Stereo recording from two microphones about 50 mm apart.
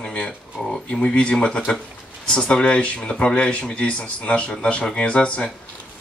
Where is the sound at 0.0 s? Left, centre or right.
Centre.